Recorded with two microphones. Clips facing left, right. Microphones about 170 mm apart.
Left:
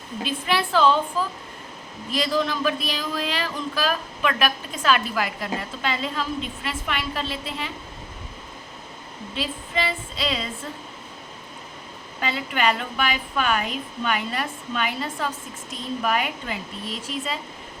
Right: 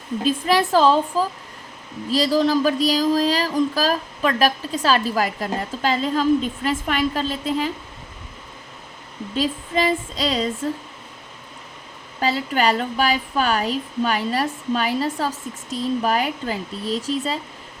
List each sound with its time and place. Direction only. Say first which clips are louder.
0.3 s speech: right 6 dB; 40° right (ahead or behind)
9.3 s speech: right 6 dB; 40° right (ahead or behind)
12.2 s speech: right 4 dB; 35° right (ahead or behind)